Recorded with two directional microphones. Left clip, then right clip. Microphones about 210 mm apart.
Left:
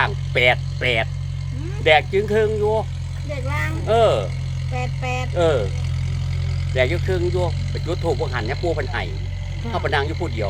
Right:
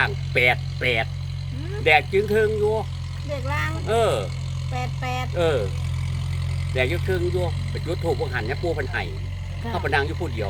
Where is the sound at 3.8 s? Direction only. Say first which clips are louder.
Left 5 dB; centre (ahead or behind).